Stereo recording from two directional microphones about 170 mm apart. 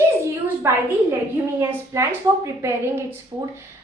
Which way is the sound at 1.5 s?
15° right (ahead or behind).